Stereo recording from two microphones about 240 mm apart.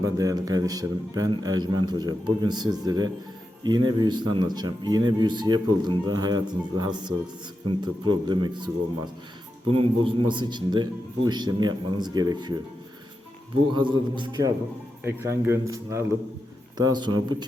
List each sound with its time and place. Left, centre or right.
0.0 s a man's voice: centre
9.7 s a man's voice: right
13.7 s a man's voice: centre